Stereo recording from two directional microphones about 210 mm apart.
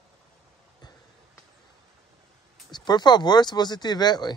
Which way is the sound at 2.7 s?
20° left (ahead or behind).